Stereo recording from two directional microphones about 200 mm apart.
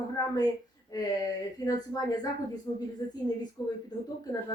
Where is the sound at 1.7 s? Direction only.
20° left (ahead or behind).